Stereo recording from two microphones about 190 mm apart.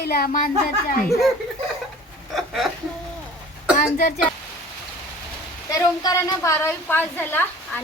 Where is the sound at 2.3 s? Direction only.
Centre (ahead or behind).